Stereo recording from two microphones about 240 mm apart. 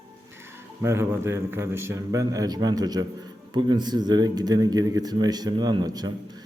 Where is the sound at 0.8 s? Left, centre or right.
Centre.